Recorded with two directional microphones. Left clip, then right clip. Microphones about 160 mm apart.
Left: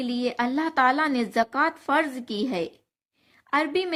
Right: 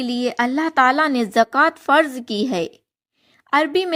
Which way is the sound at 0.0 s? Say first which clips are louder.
Right 6 dB; 45° right (ahead or behind).